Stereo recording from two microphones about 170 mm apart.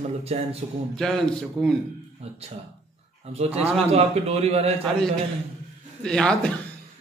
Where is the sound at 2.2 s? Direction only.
35° right (ahead or behind).